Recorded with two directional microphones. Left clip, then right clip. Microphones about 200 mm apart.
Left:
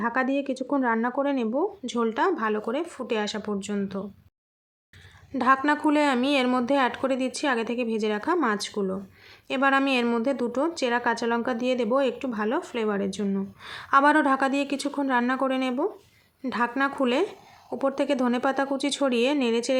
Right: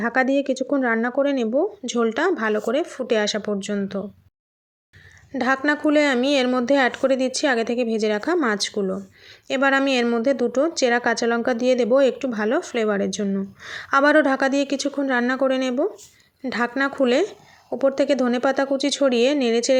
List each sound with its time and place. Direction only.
0.0 s a woman's voice: 15° right (ahead or behind)
5.4 s a woman's voice: 10° right (ahead or behind)